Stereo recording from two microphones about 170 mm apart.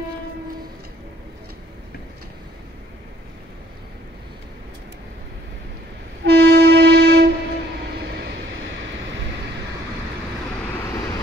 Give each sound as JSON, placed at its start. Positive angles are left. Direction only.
{"t": 6.2, "sound": "music", "side_deg": -75}
{"t": 7.7, "sound": "vehicle", "side_deg": -80}